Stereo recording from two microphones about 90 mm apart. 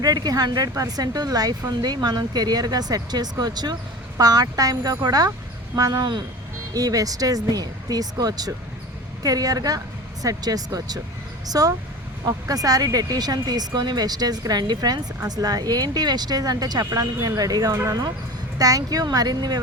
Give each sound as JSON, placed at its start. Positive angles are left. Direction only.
{"t": 0.0, "sound": "speech", "side_deg": -45}